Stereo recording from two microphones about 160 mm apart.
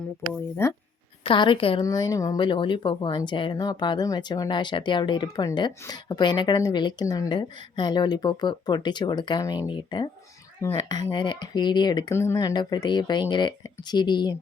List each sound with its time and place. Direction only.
0.6 s speech: 15° left (ahead or behind)
1.2 s a woman's voice: 30° left (ahead or behind)
1.8 s a woman's voice: 20° left (ahead or behind)